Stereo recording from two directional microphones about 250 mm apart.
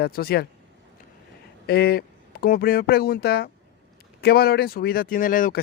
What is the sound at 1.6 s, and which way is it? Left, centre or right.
Speech, left.